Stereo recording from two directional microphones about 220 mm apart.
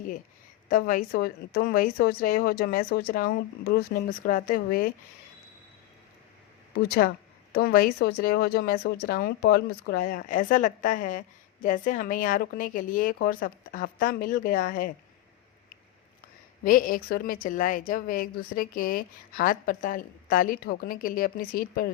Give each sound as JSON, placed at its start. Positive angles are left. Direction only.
{"t": 0.7, "sound": "a woman's voice", "side_deg": 40}
{"t": 7.5, "sound": "a woman's voice", "side_deg": 45}
{"t": 16.6, "sound": "a woman's voice", "side_deg": 40}